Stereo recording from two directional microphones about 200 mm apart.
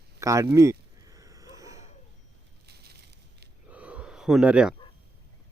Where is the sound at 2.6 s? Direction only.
55° right (ahead or behind).